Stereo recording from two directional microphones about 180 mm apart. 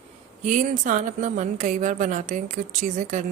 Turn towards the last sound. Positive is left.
turn(degrees=-45)  # may be behind; listen again after turning